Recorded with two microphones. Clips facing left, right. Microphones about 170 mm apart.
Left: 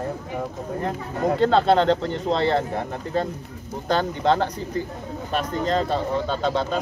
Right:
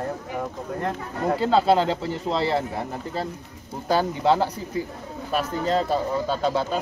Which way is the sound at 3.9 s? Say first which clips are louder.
Even; 10° right (ahead or behind).